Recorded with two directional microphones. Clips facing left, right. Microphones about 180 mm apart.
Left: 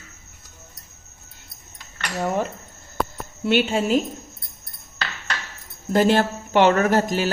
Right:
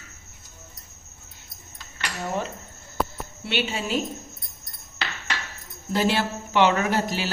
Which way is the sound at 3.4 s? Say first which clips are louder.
Left 8 dB; 50° left (ahead or behind).